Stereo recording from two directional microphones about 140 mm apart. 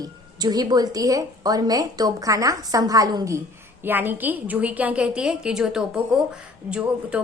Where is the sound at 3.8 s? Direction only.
15° right (ahead or behind).